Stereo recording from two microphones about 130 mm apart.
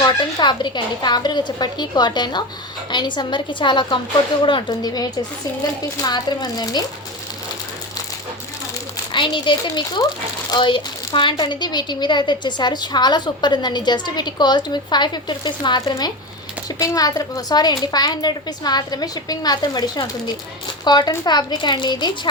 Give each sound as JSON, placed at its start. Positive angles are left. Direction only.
{"t": 0.0, "sound": "a woman's voice", "side_deg": 35}
{"t": 9.1, "sound": "a woman's voice", "side_deg": 40}